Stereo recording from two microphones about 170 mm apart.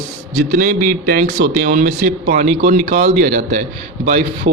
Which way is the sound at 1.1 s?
60° right (ahead or behind).